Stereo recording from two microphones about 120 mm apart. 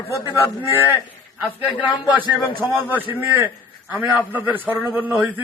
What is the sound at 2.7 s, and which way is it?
A woman's voice, 15° right (ahead or behind).